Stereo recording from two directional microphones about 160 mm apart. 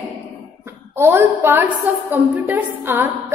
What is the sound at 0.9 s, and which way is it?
A woman's voice, 15° right (ahead or behind).